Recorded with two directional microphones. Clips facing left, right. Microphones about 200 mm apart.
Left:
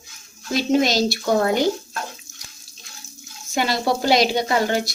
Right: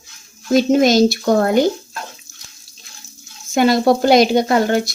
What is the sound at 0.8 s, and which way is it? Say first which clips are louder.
Speech: right 7 dB; 50° right (ahead or behind).